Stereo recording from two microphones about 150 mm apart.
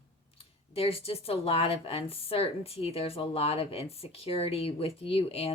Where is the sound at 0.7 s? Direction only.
40° left (ahead or behind).